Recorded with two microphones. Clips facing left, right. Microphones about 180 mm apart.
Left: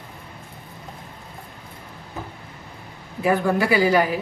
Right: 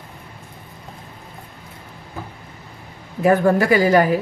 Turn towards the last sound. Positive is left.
turn(degrees=-45)  # may be behind; listen again after turning